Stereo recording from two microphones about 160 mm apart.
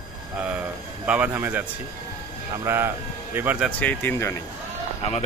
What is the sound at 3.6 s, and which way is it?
Speech, 10° left (ahead or behind).